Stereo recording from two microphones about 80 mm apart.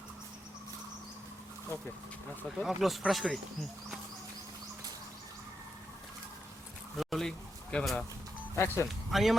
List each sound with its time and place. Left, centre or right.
2.6 s speech: centre
6.9 s a sound: centre
8.5 s speech: left
9.0 s speech: centre